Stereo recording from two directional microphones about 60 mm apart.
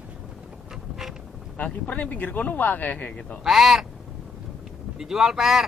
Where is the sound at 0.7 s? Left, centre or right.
Centre.